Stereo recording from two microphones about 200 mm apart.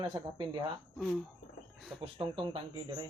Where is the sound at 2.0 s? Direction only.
25° right (ahead or behind).